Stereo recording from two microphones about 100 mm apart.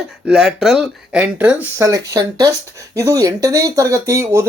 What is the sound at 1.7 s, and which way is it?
Speech, 35° right (ahead or behind).